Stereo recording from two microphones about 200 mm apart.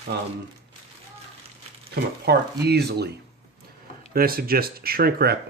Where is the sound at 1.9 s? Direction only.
55° right (ahead or behind).